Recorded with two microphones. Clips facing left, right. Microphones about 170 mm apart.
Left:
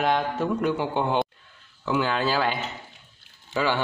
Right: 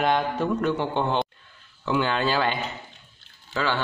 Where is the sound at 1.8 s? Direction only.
5° left (ahead or behind).